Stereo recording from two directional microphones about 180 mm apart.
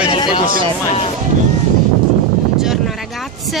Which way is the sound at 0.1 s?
25° left (ahead or behind).